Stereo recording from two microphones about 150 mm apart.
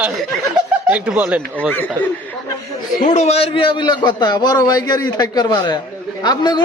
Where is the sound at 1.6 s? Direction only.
10° left (ahead or behind).